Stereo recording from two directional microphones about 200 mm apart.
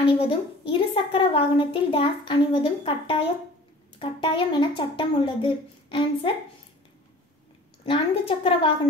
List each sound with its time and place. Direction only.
0.0 s a woman's voice: 25° left (ahead or behind)
7.8 s a woman's voice: 25° left (ahead or behind)